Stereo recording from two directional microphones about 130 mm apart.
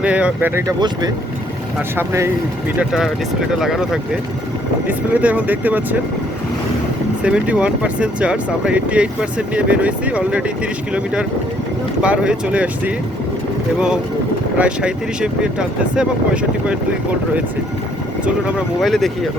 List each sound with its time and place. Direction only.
0.0 s speech: 10° right (ahead or behind)
2.0 s speech: 20° right (ahead or behind)
2.7 s speech: 5° right (ahead or behind)
4.9 s speech: 10° right (ahead or behind)
7.2 s speech: 10° right (ahead or behind)
18.3 s speech: 10° right (ahead or behind)